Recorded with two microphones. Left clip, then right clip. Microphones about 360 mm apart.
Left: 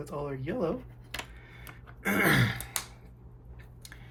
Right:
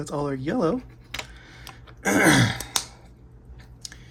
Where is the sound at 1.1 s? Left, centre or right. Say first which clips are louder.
Right 5 dB; centre.